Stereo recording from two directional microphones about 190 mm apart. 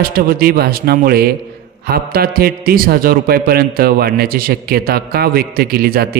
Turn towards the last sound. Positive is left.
turn(degrees=-55)  # may be behind; listen again after turning